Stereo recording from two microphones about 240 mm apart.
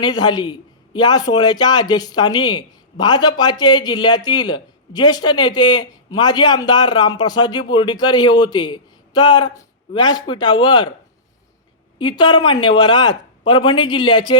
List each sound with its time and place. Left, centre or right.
0.0 s a man's voice: centre
11.9 s speech: centre